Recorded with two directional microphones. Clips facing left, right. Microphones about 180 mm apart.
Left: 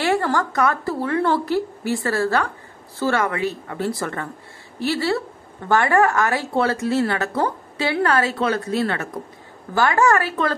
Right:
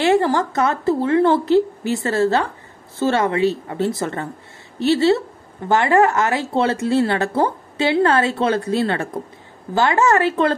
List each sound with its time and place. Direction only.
0.0 s a woman's voice: 20° right (ahead or behind)